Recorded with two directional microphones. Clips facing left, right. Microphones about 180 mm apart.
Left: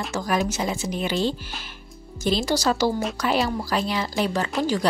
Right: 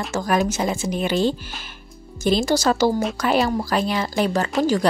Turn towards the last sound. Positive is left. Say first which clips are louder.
# right 4 dB
turn(degrees=-45)  # may be behind; listen again after turning